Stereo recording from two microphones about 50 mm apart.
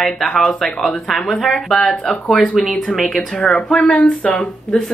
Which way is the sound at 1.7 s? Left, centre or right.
Centre.